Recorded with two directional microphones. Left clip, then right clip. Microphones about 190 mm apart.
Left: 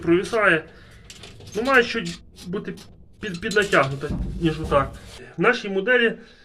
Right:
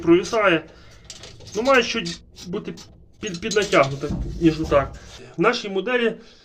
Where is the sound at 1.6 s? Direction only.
15° right (ahead or behind).